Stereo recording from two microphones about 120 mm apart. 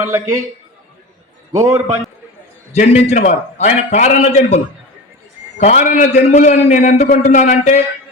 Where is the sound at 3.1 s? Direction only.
75° left (ahead or behind).